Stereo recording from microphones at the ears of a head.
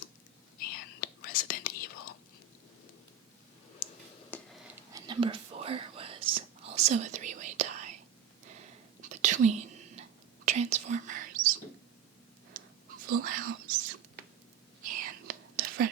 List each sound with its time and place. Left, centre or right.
0.6 s whispering: left
5.0 s whispering: right